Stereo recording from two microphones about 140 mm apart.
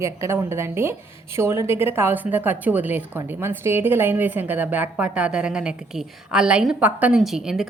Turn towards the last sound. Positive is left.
turn(degrees=-5)  # may be behind; listen again after turning